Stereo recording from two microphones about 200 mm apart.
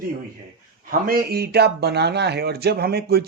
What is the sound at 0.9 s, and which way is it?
Speech, 45° right (ahead or behind).